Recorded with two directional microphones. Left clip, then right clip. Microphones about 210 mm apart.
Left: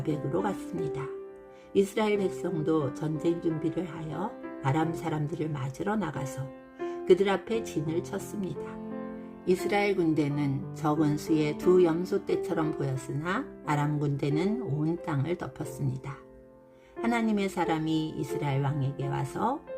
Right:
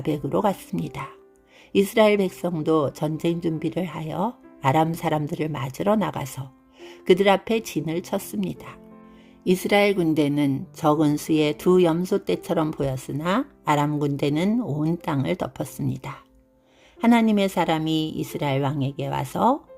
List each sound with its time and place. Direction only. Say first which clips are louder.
0.0 s speech: right 7 dB; 40° right (ahead or behind)